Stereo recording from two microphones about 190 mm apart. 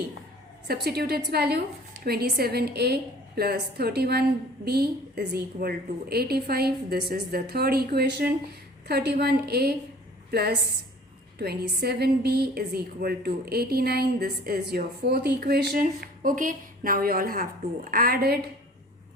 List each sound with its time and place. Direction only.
0.9 s a woman's voice: 55° right (ahead or behind)